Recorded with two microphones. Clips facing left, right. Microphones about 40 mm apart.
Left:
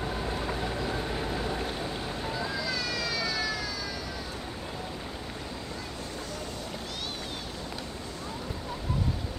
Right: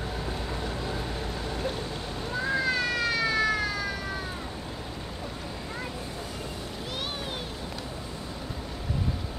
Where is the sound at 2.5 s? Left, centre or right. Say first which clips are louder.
Right 5 dB; right.